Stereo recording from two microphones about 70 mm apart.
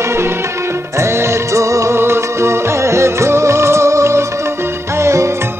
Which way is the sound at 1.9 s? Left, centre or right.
Right.